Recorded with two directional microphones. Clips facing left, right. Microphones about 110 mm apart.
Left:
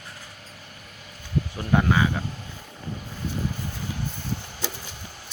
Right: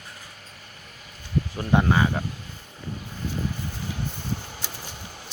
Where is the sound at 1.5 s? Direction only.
25° right (ahead or behind).